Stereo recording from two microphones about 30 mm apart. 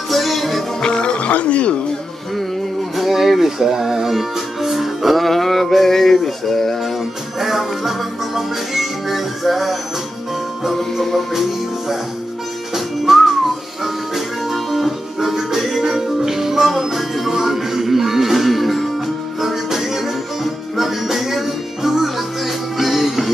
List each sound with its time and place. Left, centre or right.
0.1 s music: centre
0.8 s music: left
1.4 s speech: left
3.0 s music: centre
6.2 s a sound: centre
7.3 s music: centre
12.7 s whistling: centre
13.8 s music: centre
19.4 s music: centre